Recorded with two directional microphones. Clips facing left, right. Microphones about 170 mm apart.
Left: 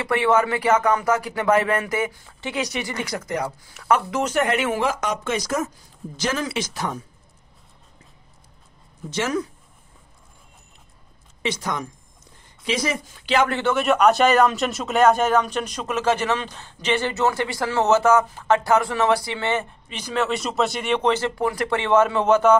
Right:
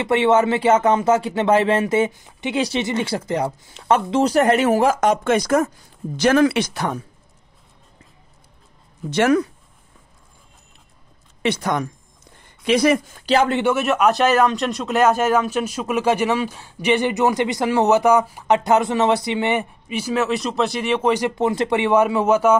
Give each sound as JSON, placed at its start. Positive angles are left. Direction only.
{"t": 0.0, "sound": "speech", "side_deg": -25}
{"t": 9.1, "sound": "speech", "side_deg": -60}
{"t": 11.4, "sound": "speech", "side_deg": -60}
{"t": 13.5, "sound": "speech", "side_deg": -15}
{"t": 13.7, "sound": "speech", "side_deg": -5}